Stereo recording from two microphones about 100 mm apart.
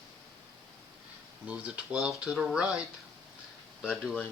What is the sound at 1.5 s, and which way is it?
Speech, 10° right (ahead or behind).